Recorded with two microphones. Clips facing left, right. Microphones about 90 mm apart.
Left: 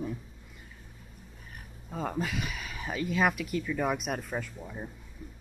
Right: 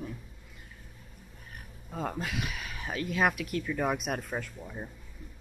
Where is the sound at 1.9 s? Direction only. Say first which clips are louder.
Left 2 dB; centre (ahead or behind).